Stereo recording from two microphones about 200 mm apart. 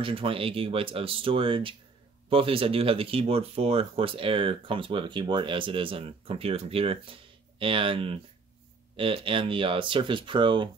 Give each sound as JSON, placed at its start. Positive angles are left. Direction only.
{"t": 0.0, "sound": "speech", "side_deg": -25}